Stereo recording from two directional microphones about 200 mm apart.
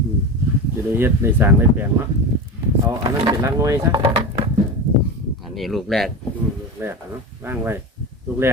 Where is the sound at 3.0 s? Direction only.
20° right (ahead or behind).